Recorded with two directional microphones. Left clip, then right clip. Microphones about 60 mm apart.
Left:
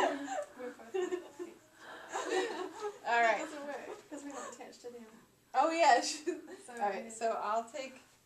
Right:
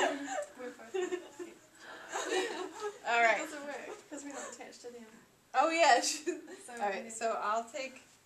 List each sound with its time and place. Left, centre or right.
0.0 s chuckle: centre
0.9 s a sound: centre
1.9 s gasp: centre
2.1 s chuckle: centre
3.0 s a sound: centre
5.5 s a woman's voice: centre